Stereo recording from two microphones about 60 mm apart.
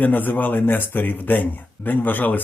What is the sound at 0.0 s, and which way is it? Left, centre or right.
Speech, left.